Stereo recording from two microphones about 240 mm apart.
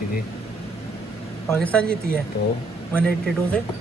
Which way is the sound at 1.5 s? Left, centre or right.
Centre.